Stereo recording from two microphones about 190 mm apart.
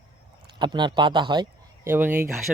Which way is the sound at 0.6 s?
25° right (ahead or behind).